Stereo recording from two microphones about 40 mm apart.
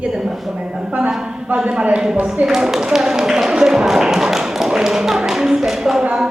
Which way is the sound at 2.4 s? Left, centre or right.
Centre.